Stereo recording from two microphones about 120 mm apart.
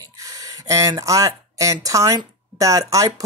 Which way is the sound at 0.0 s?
30° right (ahead or behind).